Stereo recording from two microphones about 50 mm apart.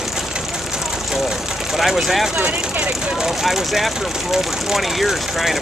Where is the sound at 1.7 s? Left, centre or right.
Centre.